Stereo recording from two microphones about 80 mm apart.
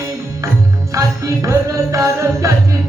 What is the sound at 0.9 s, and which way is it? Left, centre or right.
Music, right.